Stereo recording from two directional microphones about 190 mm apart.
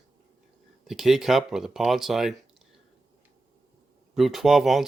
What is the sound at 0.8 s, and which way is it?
Speech, centre (ahead or behind).